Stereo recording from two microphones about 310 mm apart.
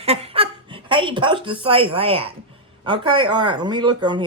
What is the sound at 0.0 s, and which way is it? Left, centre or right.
Speech, centre.